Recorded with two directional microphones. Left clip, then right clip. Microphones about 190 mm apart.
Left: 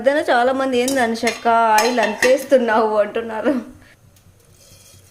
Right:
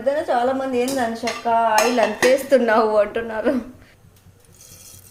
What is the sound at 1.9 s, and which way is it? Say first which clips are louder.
Speech: left 1 dB; 10° left (ahead or behind).